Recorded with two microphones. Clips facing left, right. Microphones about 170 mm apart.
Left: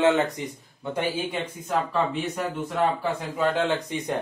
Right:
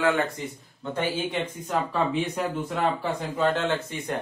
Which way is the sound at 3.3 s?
10° left (ahead or behind).